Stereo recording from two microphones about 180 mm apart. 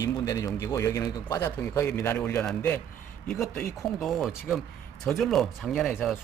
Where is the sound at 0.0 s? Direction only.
20° left (ahead or behind).